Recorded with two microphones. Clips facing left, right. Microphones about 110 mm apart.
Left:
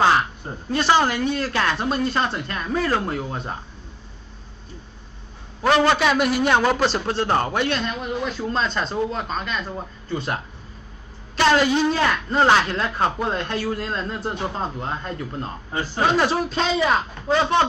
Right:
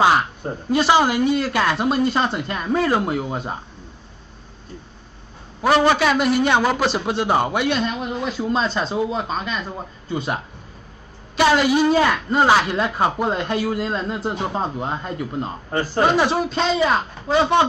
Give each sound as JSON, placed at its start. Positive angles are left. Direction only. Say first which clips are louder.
{"t": 0.8, "sound": "a man's voice", "louder": "right 2 dB", "side_deg": -10}
{"t": 5.6, "sound": "a man's voice", "louder": "right 1 dB", "side_deg": -5}
{"t": 15.7, "sound": "a man's voice", "louder": "right 5 dB", "side_deg": -45}
{"t": 16.2, "sound": "speech", "louder": "right 2 dB", "side_deg": 0}